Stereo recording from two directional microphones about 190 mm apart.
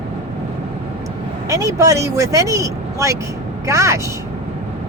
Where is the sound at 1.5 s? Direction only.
15° right (ahead or behind).